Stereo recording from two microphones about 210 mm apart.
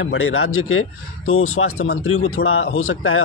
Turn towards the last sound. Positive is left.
turn(degrees=75)  # may be behind; listen again after turning